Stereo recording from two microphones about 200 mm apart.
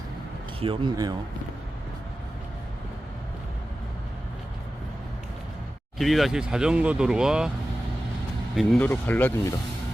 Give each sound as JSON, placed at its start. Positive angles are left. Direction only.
{"t": 0.6, "sound": "speech", "side_deg": -25}
{"t": 6.0, "sound": "speech", "side_deg": 0}
{"t": 8.5, "sound": "speech", "side_deg": 5}